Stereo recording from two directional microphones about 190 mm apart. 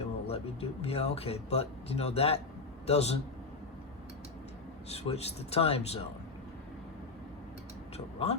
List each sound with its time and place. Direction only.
0.0 s speech: 30° left (ahead or behind)
4.9 s speech: 35° left (ahead or behind)
7.9 s speech: 35° left (ahead or behind)